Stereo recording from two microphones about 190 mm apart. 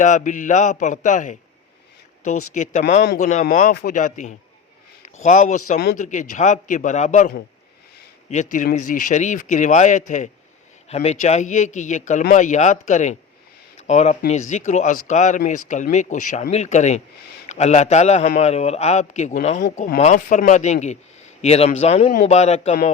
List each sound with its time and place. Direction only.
0.0 s a man's voice: 40° left (ahead or behind)